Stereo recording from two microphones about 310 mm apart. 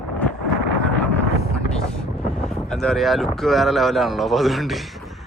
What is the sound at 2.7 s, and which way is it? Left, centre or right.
Speech, centre.